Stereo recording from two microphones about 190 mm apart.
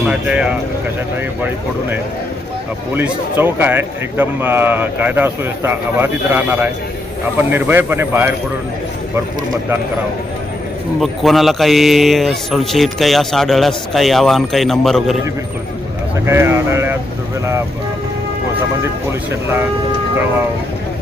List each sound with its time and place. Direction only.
0.0 s speech: 5° right (ahead or behind)
2.9 s a man's voice: 10° right (ahead or behind)
11.0 s speech: centre (ahead or behind)
16.2 s a man's voice: 15° right (ahead or behind)